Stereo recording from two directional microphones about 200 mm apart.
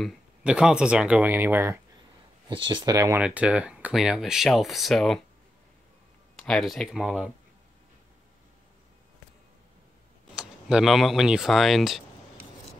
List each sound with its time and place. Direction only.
0.0 s speech: 5° right (ahead or behind)
2.4 s speech: 25° right (ahead or behind)
3.2 s speech: 5° right (ahead or behind)
6.3 s speech: centre (ahead or behind)
10.4 s speech: 5° right (ahead or behind)